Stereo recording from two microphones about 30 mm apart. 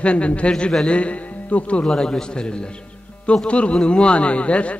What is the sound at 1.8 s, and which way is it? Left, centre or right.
A man's voice, centre.